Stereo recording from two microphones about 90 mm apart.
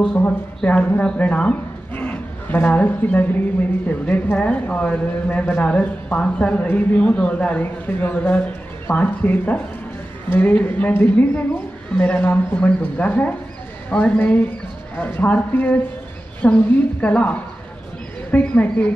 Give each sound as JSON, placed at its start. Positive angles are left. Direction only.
{"t": 0.7, "sound": "a man's voice", "side_deg": 15}